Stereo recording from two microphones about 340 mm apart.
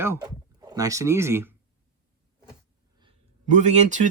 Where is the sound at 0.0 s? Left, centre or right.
Centre.